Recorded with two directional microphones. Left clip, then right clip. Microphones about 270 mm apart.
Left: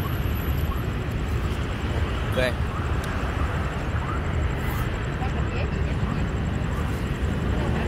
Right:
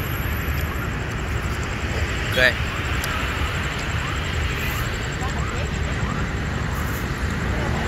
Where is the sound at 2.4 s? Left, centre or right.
Centre.